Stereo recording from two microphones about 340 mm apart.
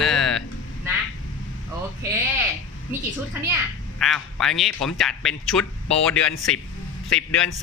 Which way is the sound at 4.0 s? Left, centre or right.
Centre.